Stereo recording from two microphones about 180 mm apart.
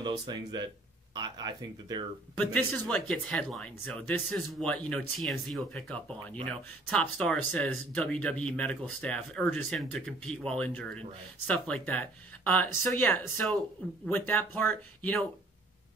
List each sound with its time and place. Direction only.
0.0 s speech: 20° right (ahead or behind)
2.3 s speech: 5° left (ahead or behind)